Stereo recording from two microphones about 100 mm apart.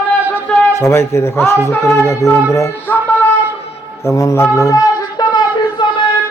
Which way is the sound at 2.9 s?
20° left (ahead or behind).